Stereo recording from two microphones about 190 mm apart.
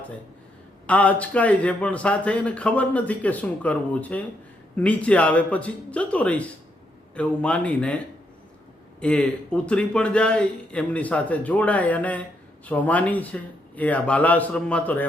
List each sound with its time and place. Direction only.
0.9 s speech: 5° left (ahead or behind)